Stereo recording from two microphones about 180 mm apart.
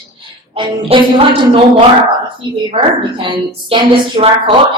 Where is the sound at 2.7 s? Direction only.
30° right (ahead or behind).